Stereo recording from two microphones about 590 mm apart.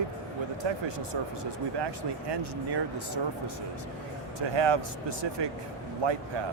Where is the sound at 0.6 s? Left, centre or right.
Right.